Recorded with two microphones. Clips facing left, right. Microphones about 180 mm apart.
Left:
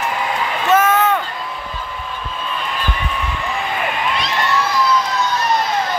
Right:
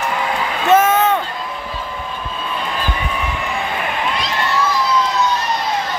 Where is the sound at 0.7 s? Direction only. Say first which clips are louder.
Right 1 dB; 25° right (ahead or behind).